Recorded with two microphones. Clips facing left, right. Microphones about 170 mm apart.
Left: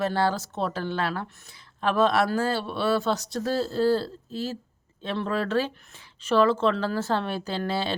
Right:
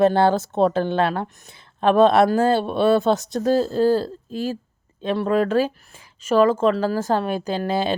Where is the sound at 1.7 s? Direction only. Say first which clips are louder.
Right 8 dB; 55° right (ahead or behind).